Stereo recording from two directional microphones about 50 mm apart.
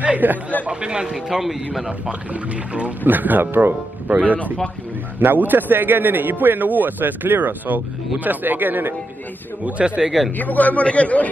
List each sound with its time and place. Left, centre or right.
0.0 s a sound: right
0.7 s speech: right
1.0 s speech: centre
1.9 s speech: right
3.1 s a man's voice: right
9.7 s speech: right
10.3 s a man's voice: left